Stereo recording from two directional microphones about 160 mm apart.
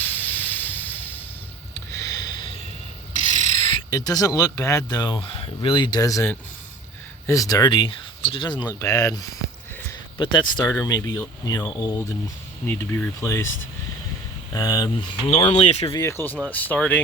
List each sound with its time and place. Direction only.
0.0 s hiss: 10° left (ahead or behind)
1.7 s a sound: 20° left (ahead or behind)
3.1 s mechanisms: 50° left (ahead or behind)
3.8 s speech: 25° left (ahead or behind)
14.5 s speech: 25° left (ahead or behind)
15.3 s speech: 40° left (ahead or behind)
15.9 s speech: 20° left (ahead or behind)